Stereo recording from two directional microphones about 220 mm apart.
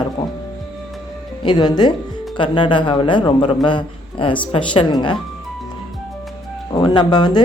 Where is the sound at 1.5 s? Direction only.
20° left (ahead or behind).